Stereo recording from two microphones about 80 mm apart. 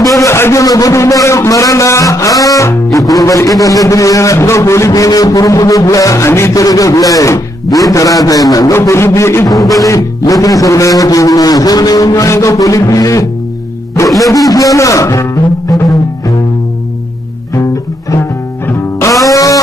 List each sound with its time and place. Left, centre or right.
0.2 s a man's voice: left
8.7 s a man's voice: left
9.8 s a man's voice: left
14.3 s a man's voice: left
18.7 s music: left